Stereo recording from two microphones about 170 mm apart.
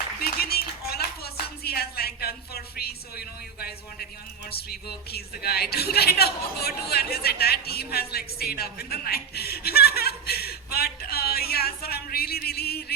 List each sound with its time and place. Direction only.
0.2 s clapping: 65° left (ahead or behind)
4.5 s speech: 65° left (ahead or behind)